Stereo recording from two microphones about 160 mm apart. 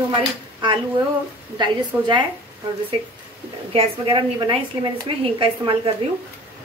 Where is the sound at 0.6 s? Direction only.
30° right (ahead or behind).